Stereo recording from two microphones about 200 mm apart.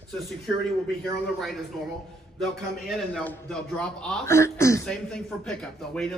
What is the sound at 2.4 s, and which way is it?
A man's voice, centre (ahead or behind).